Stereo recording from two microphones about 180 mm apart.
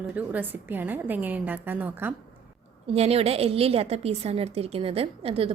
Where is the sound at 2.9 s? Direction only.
35° right (ahead or behind).